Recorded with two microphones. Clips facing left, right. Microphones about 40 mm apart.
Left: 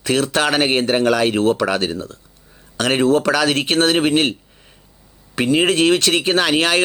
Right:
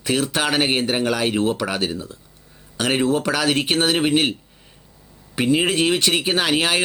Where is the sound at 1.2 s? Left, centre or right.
Left.